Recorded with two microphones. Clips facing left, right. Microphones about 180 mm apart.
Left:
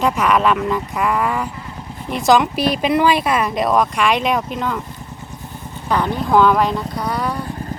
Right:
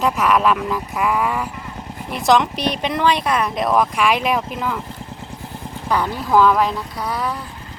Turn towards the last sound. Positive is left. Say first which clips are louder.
# left 2 dB
turn(degrees=0)  # may be behind; listen again after turning